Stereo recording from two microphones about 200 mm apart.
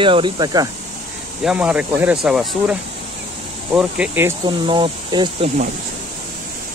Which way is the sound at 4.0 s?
10° right (ahead or behind).